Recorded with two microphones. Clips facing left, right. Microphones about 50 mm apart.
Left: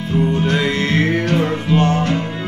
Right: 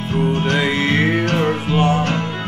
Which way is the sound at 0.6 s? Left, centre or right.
Centre.